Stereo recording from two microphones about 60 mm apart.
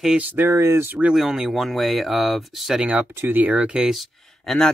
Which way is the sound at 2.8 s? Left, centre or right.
Centre.